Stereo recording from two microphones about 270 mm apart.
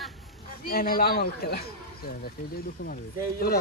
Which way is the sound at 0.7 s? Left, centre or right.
Left.